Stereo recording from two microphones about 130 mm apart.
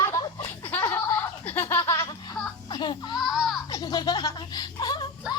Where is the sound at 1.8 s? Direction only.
30° left (ahead or behind).